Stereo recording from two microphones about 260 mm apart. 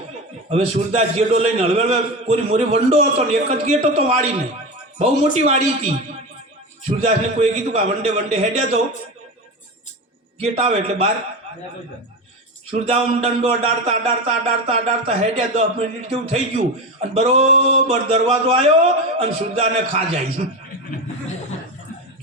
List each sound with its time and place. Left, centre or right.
0.5 s a man's voice: right
10.4 s a man's voice: right
12.7 s a man's voice: right